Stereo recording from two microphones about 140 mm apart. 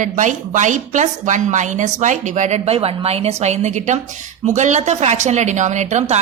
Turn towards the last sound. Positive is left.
turn(degrees=-55)  # may be behind; listen again after turning